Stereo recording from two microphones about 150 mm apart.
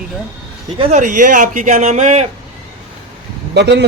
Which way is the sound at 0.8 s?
50° right (ahead or behind).